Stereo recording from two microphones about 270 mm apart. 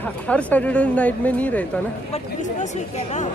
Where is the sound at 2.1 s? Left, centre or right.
Left.